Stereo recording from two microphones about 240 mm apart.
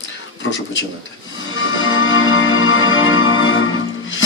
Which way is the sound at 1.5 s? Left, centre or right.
Left.